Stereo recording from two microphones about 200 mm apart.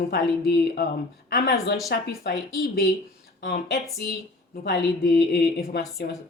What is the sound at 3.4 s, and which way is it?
Speech, 55° left (ahead or behind).